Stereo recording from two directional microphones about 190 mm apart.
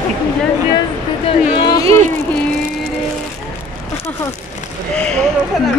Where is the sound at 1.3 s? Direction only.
30° left (ahead or behind).